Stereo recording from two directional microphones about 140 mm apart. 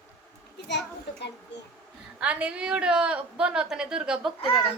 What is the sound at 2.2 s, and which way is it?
A woman's voice, 10° right (ahead or behind).